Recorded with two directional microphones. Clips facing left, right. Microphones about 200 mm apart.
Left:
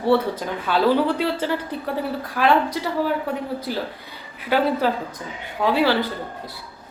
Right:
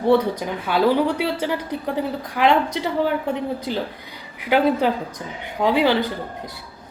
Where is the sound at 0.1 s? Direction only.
15° right (ahead or behind).